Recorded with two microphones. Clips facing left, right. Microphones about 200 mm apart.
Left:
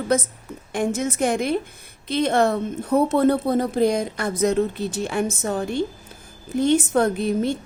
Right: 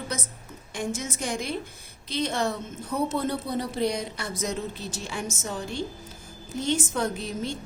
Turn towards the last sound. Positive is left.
turn(degrees=60)  # may be behind; listen again after turning